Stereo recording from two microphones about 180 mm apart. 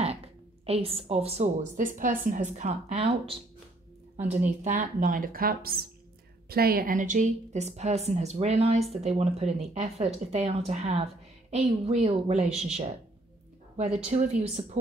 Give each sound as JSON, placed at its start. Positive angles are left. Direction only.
{"t": 0.7, "sound": "a woman's voice", "side_deg": -35}
{"t": 14.0, "sound": "a woman's voice", "side_deg": -40}